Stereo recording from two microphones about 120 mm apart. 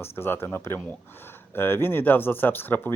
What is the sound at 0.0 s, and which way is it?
Speech, 20° left (ahead or behind).